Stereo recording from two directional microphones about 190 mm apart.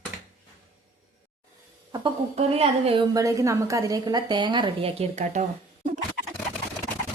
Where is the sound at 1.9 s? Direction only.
30° right (ahead or behind).